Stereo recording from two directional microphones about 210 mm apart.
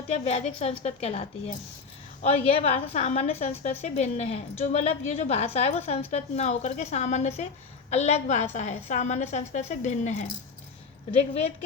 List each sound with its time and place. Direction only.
0.1 s a woman's voice: 30° left (ahead or behind)